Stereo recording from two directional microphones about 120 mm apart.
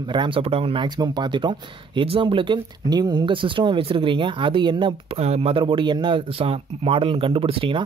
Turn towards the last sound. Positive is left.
turn(degrees=-45)  # may be behind; listen again after turning